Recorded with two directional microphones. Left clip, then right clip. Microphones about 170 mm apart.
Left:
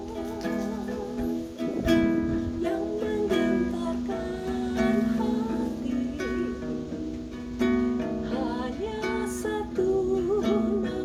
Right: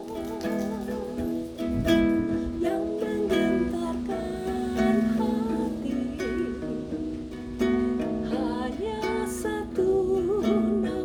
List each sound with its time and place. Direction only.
1.8 s music: 50° right (ahead or behind)
3.2 s music: 50° right (ahead or behind)
4.8 s music: 50° right (ahead or behind)
7.6 s music: 45° right (ahead or behind)